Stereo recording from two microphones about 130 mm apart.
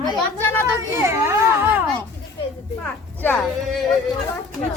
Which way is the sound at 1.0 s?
20° right (ahead or behind).